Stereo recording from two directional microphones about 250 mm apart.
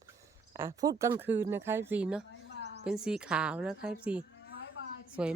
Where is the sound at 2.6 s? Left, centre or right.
Right.